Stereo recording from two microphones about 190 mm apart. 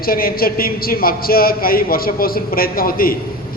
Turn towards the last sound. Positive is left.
turn(degrees=50)  # may be behind; listen again after turning